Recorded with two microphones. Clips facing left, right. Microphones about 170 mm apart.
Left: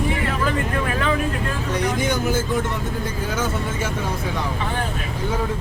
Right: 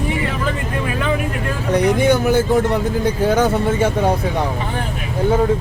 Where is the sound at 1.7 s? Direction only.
60° right (ahead or behind).